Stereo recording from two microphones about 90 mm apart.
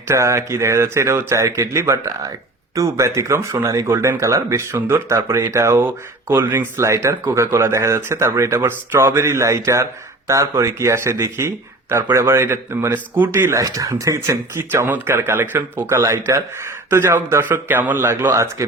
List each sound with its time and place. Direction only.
0.1 s speech: 30° right (ahead or behind)
13.7 s speech: 40° right (ahead or behind)
14.6 s speech: 25° right (ahead or behind)